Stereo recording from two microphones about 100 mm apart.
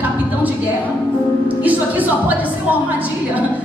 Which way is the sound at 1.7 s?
15° right (ahead or behind).